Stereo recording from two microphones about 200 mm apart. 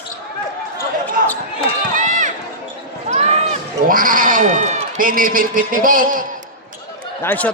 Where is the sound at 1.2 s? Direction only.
45° right (ahead or behind).